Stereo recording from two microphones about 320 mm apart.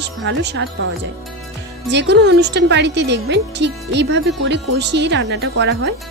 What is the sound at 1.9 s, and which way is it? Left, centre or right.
Speech, right.